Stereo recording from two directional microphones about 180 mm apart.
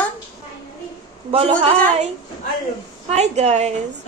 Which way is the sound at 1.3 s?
30° right (ahead or behind).